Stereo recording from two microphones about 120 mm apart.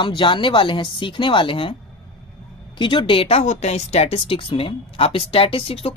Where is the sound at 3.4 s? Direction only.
70° left (ahead or behind).